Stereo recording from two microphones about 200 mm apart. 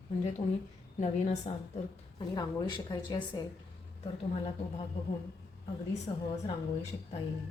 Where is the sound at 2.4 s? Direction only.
20° left (ahead or behind).